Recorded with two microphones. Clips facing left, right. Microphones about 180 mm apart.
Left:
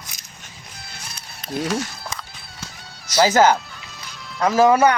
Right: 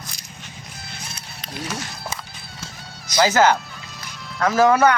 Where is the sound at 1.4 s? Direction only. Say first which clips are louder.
Left 9 dB; 50° left (ahead or behind).